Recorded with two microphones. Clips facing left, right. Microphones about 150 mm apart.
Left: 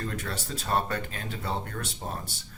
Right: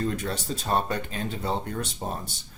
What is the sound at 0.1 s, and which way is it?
Speech, 20° right (ahead or behind).